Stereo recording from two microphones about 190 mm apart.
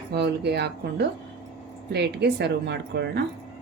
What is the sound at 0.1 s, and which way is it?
Speech, 60° right (ahead or behind).